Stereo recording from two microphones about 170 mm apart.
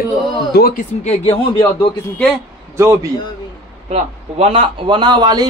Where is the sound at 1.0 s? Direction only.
35° left (ahead or behind).